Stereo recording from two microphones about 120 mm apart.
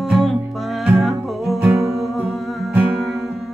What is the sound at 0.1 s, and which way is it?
Music, centre (ahead or behind).